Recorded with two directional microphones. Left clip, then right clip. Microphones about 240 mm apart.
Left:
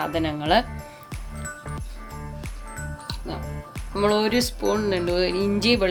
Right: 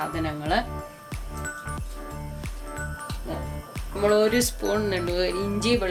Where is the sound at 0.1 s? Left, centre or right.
Left.